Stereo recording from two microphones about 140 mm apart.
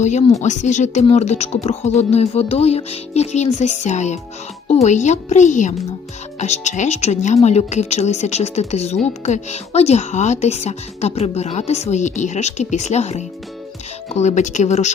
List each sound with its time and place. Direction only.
0.0 s speech: 55° left (ahead or behind)